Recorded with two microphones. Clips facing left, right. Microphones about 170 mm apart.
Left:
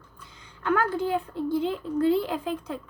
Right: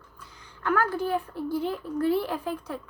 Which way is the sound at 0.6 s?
25° left (ahead or behind).